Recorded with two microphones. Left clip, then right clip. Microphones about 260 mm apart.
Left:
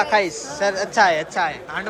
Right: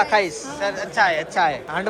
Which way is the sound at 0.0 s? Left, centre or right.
Centre.